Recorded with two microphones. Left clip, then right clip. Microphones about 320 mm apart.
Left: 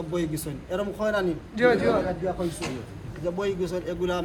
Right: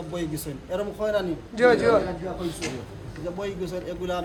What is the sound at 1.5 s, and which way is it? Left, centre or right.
Speech, centre.